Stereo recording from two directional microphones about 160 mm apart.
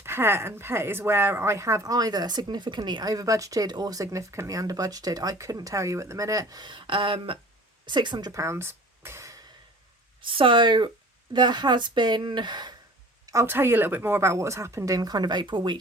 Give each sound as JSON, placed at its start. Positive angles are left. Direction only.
{"t": 0.0, "sound": "speech", "side_deg": -15}
{"t": 10.2, "sound": "speech", "side_deg": -35}
{"t": 13.2, "sound": "speech", "side_deg": -15}